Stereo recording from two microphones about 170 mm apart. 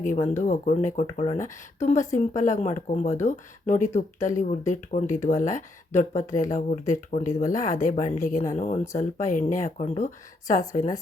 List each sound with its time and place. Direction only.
0.3 s speech: 45° left (ahead or behind)
10.7 s a woman's voice: 20° left (ahead or behind)